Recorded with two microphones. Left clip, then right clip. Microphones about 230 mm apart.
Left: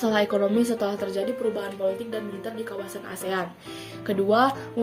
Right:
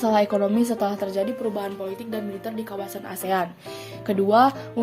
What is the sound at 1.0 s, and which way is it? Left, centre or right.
Speech, right.